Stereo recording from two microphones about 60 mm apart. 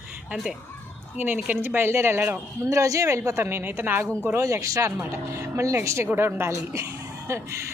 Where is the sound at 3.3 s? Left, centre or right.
Right.